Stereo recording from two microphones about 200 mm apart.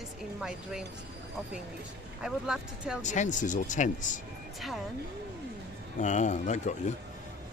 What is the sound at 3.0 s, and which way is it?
Speech, 35° left (ahead or behind).